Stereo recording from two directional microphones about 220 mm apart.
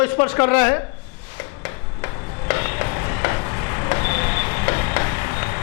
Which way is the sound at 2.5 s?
15° left (ahead or behind).